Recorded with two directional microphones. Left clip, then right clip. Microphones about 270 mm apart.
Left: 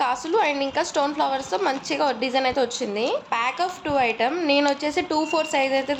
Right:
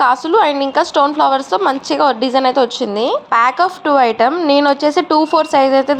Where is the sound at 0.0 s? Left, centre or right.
Centre.